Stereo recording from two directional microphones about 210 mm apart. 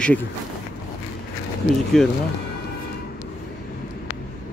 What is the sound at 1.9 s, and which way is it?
Speech, centre (ahead or behind).